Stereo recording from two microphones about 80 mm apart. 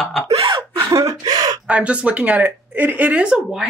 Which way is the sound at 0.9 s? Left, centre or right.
Right.